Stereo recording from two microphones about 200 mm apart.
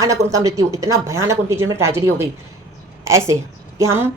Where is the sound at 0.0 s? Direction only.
15° right (ahead or behind).